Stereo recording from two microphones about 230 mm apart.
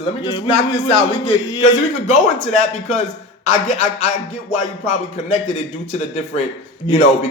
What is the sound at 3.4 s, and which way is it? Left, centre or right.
Speech, left.